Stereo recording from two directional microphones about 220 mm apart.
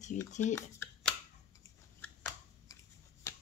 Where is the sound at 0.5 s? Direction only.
10° left (ahead or behind).